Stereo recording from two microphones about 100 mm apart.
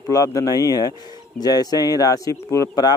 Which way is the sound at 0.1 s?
35° left (ahead or behind).